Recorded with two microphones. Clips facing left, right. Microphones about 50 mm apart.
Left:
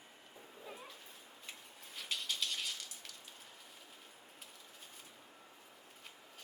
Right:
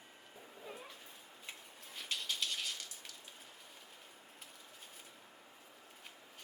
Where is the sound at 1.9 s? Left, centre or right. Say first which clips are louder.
Even; centre.